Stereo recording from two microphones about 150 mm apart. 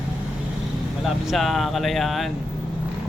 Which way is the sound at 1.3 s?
Centre (ahead or behind).